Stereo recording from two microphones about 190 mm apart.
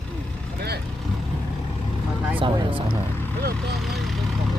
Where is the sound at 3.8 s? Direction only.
Centre (ahead or behind).